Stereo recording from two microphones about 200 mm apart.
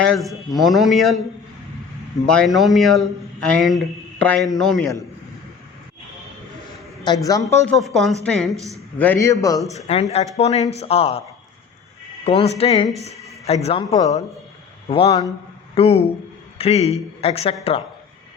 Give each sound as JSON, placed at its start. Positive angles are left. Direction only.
{"t": 0.0, "sound": "speech", "side_deg": 0}
{"t": 2.2, "sound": "speech", "side_deg": 5}
{"t": 7.0, "sound": "a woman's voice", "side_deg": 20}
{"t": 7.7, "sound": "speech", "side_deg": 0}
{"t": 8.5, "sound": "speech", "side_deg": -15}
{"t": 9.0, "sound": "a woman's voice", "side_deg": 10}
{"t": 9.7, "sound": "speech", "side_deg": 35}
{"t": 12.2, "sound": "speech", "side_deg": 30}